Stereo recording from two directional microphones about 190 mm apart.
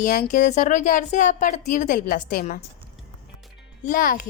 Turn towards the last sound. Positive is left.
turn(degrees=45)  # may be behind; listen again after turning